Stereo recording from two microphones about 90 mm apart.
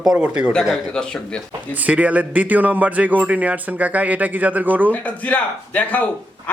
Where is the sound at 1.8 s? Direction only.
15° right (ahead or behind).